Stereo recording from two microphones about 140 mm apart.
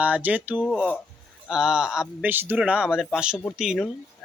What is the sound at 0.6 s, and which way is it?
Speech, 5° left (ahead or behind).